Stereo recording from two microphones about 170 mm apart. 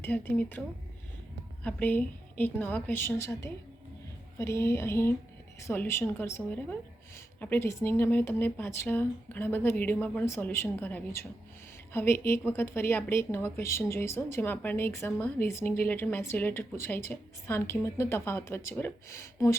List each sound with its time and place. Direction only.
0.0 s a woman's voice: 10° left (ahead or behind)
1.6 s a woman's voice: 10° left (ahead or behind)